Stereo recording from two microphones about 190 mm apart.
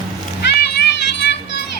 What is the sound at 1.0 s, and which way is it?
Children playing, 65° left (ahead or behind).